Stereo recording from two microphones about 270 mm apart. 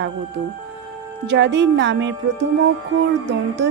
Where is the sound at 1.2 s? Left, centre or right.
Right.